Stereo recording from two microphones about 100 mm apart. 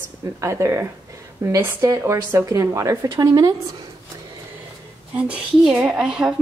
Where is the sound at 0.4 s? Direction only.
30° right (ahead or behind).